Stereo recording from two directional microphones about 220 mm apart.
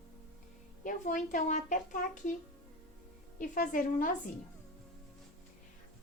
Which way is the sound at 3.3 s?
35° left (ahead or behind).